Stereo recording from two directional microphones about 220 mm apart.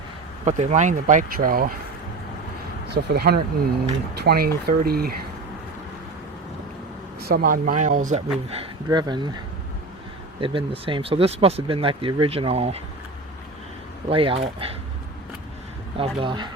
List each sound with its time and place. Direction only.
0.4 s speech: 30° right (ahead or behind)
2.9 s speech: 45° right (ahead or behind)
7.2 s speech: 45° right (ahead or behind)
8.4 s speech: 25° right (ahead or behind)
10.4 s speech: 25° right (ahead or behind)
14.1 s speech: 25° right (ahead or behind)
16.0 s speech: 20° right (ahead or behind)